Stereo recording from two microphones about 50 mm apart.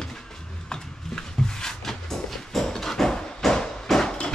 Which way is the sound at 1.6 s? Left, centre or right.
Centre.